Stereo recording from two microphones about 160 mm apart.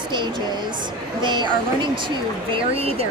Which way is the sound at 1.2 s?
30° right (ahead or behind).